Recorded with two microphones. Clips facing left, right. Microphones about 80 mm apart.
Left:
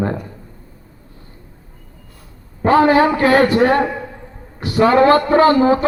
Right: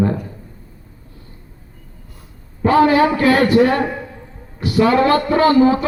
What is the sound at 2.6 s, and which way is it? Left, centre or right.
A man's voice, left.